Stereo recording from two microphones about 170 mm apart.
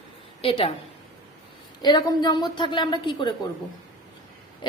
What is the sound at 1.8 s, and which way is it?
A woman's voice, 25° left (ahead or behind).